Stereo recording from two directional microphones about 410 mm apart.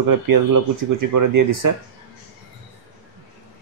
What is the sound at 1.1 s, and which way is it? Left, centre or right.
Speech, right.